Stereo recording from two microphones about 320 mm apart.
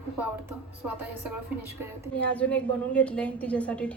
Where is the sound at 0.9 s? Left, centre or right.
Right.